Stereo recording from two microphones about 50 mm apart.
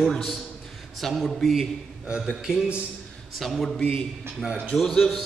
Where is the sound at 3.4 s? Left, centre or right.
Centre.